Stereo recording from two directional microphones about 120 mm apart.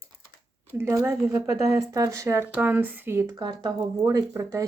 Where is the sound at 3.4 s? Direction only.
40° right (ahead or behind).